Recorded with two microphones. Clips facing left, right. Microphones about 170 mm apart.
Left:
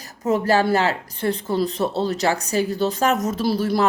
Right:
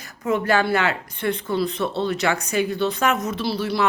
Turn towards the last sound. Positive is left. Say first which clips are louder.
# left 3 dB
turn(degrees=45)  # may be behind; listen again after turning